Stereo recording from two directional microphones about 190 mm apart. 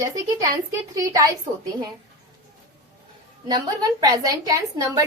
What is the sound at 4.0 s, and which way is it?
A woman's voice, 20° right (ahead or behind).